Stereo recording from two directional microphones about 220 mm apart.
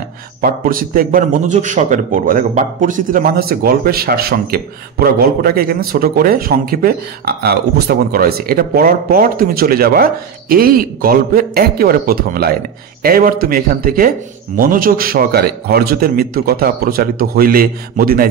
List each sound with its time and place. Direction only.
0.4 s a man's voice: 40° right (ahead or behind)